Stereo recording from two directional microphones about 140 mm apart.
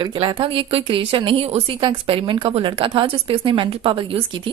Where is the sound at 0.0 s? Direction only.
35° right (ahead or behind).